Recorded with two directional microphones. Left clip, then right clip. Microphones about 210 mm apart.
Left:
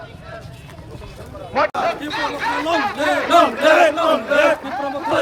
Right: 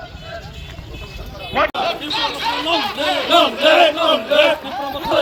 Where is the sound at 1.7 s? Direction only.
10° left (ahead or behind).